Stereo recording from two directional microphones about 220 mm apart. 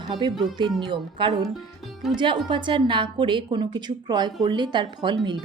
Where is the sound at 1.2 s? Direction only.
20° right (ahead or behind).